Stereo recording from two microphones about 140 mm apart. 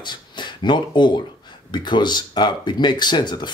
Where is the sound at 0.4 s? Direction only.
35° left (ahead or behind).